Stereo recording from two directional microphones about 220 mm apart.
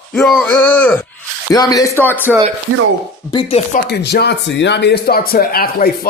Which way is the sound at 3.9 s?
50° left (ahead or behind).